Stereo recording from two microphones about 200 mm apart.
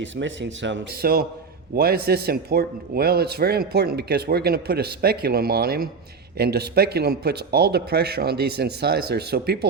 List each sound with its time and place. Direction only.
0.0 s a man's voice: 65° right (ahead or behind)